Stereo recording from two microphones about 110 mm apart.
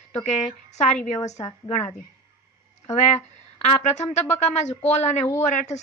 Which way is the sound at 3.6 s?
90° left.